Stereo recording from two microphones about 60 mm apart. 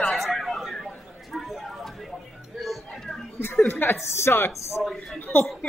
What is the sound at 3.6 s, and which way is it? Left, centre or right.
Speech, left.